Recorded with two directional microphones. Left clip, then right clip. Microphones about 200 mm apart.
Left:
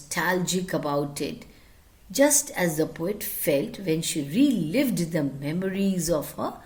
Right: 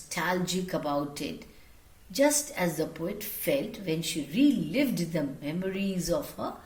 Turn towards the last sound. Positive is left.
turn(degrees=55)  # may be behind; listen again after turning